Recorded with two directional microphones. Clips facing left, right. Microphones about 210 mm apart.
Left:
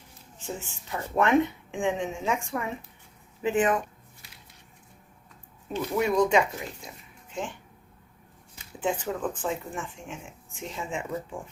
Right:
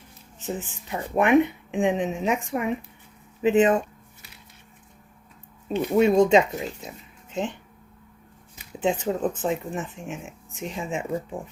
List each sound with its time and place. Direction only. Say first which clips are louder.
0.3 s a woman's voice: right 5 dB; 20° right (ahead or behind)
5.6 s speech: right 7 dB; 25° right (ahead or behind)
8.5 s speech: right 4 dB; 20° right (ahead or behind)